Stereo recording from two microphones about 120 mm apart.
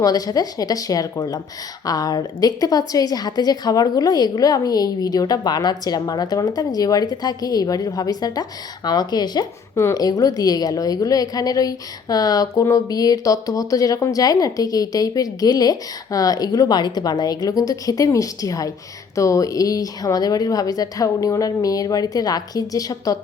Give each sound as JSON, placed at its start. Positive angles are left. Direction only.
{"t": 0.0, "sound": "a woman's voice", "side_deg": 30}